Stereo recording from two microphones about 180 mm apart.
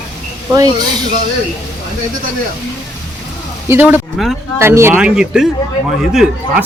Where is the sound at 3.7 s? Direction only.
10° right (ahead or behind).